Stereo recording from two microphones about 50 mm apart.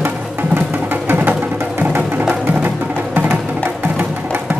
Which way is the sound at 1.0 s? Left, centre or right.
Right.